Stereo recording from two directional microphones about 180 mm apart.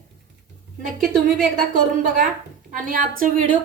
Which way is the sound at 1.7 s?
50° right (ahead or behind).